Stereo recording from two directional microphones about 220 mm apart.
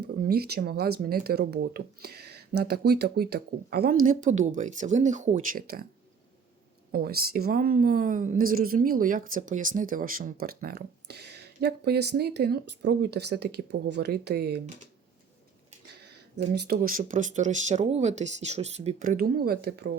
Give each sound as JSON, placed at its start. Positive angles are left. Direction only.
{"t": 0.0, "sound": "a woman's voice", "side_deg": -45}
{"t": 6.9, "sound": "a woman's voice", "side_deg": -45}
{"t": 16.6, "sound": "speech", "side_deg": -45}